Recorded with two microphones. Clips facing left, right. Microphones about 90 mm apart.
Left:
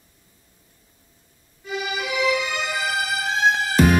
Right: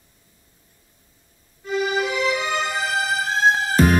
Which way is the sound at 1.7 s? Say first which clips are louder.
Right 5 dB; 40° right (ahead or behind).